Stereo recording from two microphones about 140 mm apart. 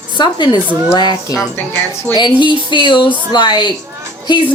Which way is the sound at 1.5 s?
15° left (ahead or behind).